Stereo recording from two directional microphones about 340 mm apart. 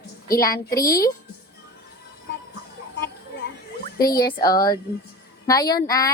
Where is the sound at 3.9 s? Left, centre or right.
Centre.